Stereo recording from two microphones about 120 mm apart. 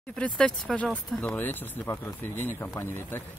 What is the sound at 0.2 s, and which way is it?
Speech, 10° left (ahead or behind).